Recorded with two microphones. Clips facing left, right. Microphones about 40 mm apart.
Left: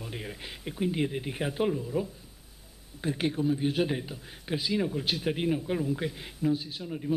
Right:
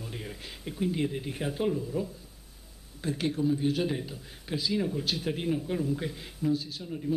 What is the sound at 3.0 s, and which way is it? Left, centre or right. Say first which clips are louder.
A man's voice: even; centre.